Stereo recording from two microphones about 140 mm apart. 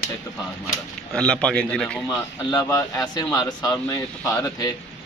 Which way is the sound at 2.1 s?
30° left (ahead or behind).